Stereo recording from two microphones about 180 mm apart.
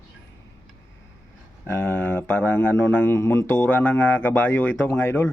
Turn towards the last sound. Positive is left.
turn(degrees=10)  # may be behind; listen again after turning